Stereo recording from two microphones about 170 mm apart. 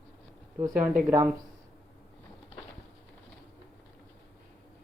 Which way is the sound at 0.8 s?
10° right (ahead or behind).